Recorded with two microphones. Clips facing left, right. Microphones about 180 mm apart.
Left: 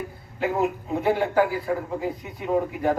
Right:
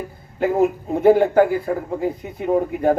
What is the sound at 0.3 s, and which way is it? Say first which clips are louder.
A man's voice: right 6 dB; 45° right (ahead or behind).